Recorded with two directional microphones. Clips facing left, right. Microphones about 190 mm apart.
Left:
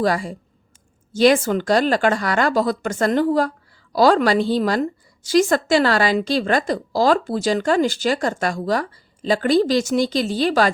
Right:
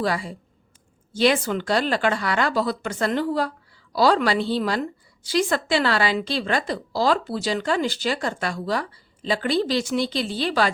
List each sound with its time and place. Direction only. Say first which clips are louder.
0.0 s a woman's voice: left 5 dB; 45° left (ahead or behind)